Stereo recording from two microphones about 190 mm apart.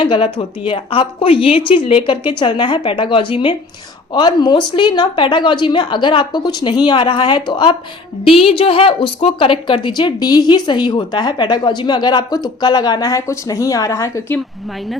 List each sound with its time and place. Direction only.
0.0 s a woman's voice: 25° left (ahead or behind)